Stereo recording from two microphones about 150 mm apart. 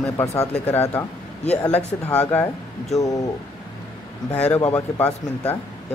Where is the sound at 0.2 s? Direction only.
20° left (ahead or behind).